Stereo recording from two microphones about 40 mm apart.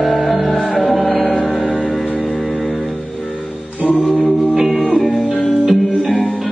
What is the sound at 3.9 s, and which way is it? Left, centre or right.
Music, left.